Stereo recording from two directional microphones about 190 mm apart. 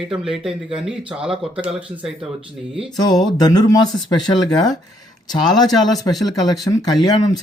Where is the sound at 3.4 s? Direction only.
20° left (ahead or behind).